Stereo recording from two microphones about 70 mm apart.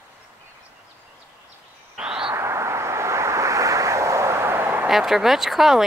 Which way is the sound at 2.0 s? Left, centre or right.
Centre.